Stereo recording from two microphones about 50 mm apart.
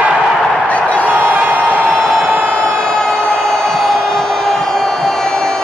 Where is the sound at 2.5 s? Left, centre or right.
Right.